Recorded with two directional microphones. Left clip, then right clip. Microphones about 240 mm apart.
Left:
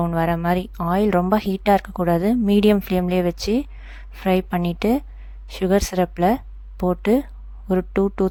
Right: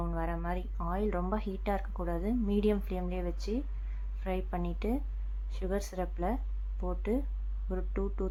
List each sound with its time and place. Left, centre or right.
0.0 s speech: left